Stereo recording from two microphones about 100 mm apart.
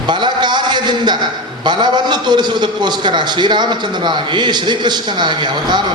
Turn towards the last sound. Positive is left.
turn(degrees=-50)  # may be behind; listen again after turning